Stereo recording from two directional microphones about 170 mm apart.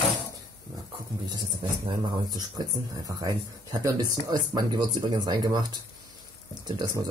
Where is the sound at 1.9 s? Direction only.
25° right (ahead or behind).